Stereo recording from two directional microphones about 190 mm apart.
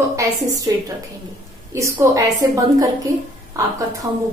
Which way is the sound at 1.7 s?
15° right (ahead or behind).